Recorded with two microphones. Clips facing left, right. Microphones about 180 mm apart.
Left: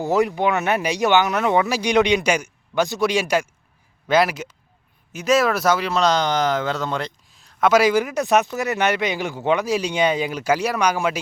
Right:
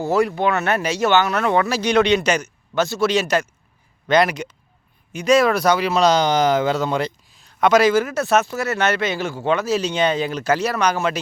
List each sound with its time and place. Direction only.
0.0 s speech: 15° left (ahead or behind)